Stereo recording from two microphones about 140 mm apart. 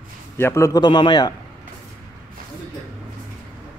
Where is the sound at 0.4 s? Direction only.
20° left (ahead or behind).